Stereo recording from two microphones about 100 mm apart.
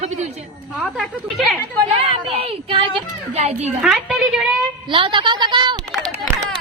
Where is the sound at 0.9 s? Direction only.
Centre (ahead or behind).